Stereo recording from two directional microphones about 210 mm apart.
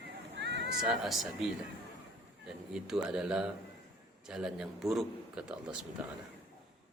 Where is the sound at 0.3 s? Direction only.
55° right (ahead or behind).